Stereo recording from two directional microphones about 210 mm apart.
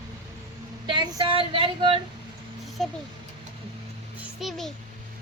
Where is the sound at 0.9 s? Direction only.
20° right (ahead or behind).